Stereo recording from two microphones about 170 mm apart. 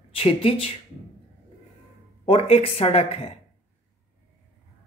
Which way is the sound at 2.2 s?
35° left (ahead or behind).